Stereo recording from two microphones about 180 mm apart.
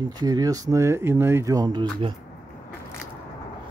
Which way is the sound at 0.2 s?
20° right (ahead or behind).